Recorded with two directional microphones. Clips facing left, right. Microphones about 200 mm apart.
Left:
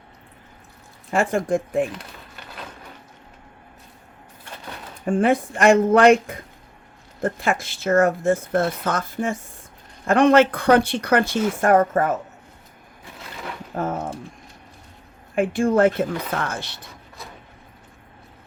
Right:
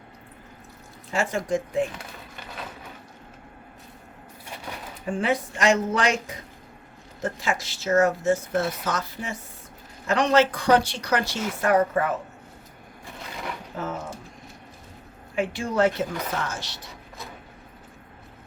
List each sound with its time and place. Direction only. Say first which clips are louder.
1.1 s speech: left 5 dB; 55° left (ahead or behind)
2.0 s a sound: even; centre (ahead or behind)
5.0 s speech: left 6 dB; 50° left (ahead or behind)
13.7 s speech: left 7 dB; 55° left (ahead or behind)
15.4 s speech: left 6 dB; 50° left (ahead or behind)